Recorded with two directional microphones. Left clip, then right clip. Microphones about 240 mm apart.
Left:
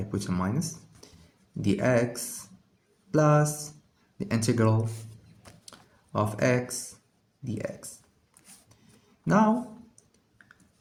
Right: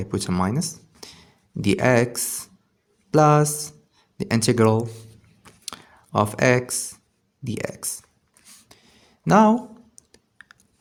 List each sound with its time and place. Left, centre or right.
0.1 s speech: right
1.6 s speech: right
5.6 s a sound: right
7.4 s speech: right
9.2 s clicking: right